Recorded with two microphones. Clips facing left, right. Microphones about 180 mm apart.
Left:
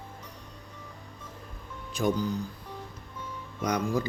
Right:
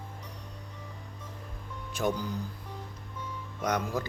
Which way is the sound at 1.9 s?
5° right (ahead or behind).